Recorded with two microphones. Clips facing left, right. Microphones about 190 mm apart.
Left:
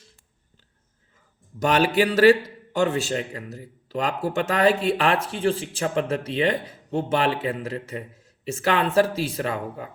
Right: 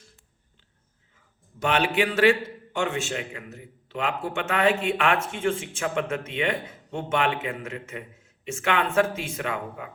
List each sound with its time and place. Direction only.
1.5 s a man's voice: 40° left (ahead or behind)